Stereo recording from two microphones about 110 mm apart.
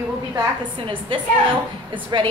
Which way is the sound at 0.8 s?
50° right (ahead or behind).